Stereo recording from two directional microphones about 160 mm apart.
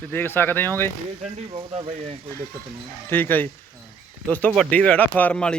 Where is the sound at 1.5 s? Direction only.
40° right (ahead or behind).